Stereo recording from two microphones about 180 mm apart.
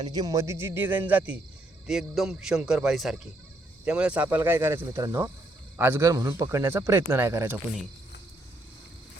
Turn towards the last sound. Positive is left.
turn(degrees=-15)  # may be behind; listen again after turning